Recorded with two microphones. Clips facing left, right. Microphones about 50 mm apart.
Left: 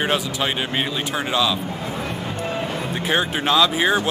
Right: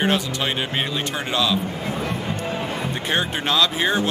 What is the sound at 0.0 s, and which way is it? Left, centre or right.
Speech, centre.